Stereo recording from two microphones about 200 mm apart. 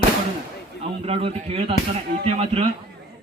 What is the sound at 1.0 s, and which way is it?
Speech, 30° right (ahead or behind).